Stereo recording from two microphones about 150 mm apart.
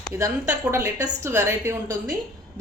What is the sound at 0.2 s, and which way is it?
Speech, 20° right (ahead or behind).